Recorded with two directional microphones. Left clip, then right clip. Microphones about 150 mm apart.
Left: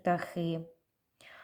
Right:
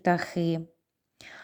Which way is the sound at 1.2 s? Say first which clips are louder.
Right 7 dB; 30° right (ahead or behind).